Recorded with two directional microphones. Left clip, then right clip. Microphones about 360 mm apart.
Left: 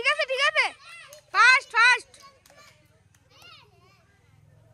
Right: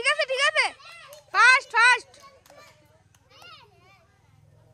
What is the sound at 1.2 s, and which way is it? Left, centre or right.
Children playing, centre.